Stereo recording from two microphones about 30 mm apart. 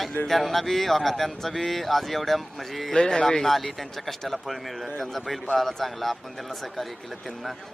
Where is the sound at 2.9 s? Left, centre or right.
Left.